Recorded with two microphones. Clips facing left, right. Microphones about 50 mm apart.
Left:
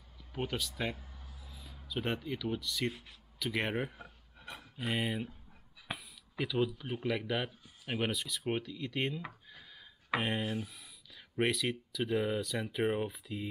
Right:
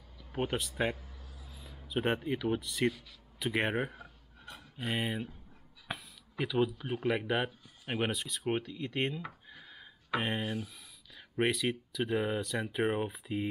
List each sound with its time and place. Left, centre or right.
0.4 s speech: centre
2.9 s speech: left
3.3 s speech: centre
5.9 s a sound: centre
6.4 s speech: centre
8.7 s speech: right
9.5 s a sound: centre
10.2 s speech: centre